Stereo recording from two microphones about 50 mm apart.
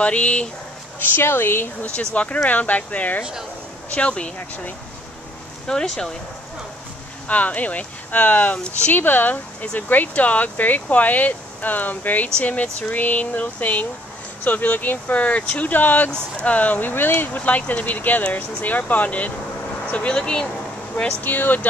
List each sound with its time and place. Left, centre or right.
0.0 s speech: left
0.9 s speech: left
2.1 s speech: left
5.7 s speech: centre
7.2 s speech: left
16.1 s speech: left
21.2 s speech: left